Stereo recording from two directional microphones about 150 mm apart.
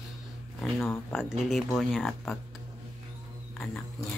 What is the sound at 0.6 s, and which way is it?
Speech, 15° left (ahead or behind).